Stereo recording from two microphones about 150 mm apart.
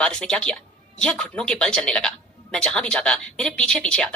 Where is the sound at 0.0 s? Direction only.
5° left (ahead or behind).